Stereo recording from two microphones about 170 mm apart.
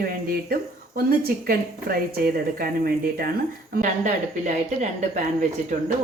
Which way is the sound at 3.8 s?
45° right (ahead or behind).